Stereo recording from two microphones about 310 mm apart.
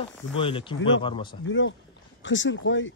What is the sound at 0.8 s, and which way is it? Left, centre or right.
Speech, left.